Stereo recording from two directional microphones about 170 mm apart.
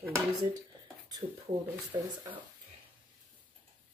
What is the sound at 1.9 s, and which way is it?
Speech, 15° right (ahead or behind).